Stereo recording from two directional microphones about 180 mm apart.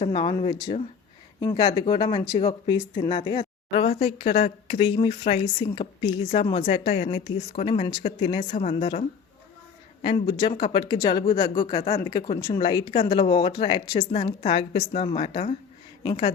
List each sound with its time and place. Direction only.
0.0 s a woman's voice: 30° left (ahead or behind)
6.7 s a woman's voice: 45° left (ahead or behind); by 8.4 s 30° left (ahead or behind)
8.4 s a woman's voice: 40° left (ahead or behind); by 11.2 s 20° left (ahead or behind)
11.6 s a woman's voice: 30° left (ahead or behind)